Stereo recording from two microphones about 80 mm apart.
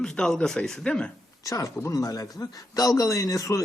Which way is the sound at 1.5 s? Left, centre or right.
Left.